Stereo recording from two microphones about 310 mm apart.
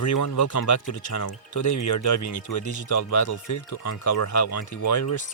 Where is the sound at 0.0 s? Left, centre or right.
Left.